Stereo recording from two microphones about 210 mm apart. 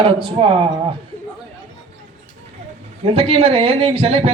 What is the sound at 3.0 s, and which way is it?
Speech, 30° right (ahead or behind).